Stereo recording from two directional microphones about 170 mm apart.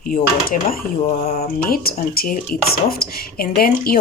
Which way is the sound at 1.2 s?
40° left (ahead or behind).